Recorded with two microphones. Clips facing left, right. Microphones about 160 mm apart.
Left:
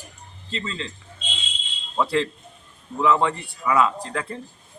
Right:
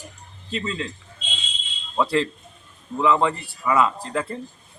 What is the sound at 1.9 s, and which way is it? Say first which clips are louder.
A man's voice: right 1 dB; centre (ahead or behind).